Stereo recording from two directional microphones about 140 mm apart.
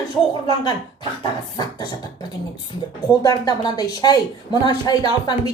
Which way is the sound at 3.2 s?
25° left (ahead or behind).